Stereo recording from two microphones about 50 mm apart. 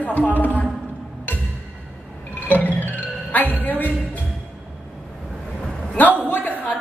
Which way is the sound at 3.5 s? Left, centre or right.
Left.